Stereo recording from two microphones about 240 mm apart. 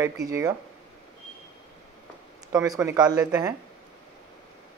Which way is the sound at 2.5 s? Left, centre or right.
Centre.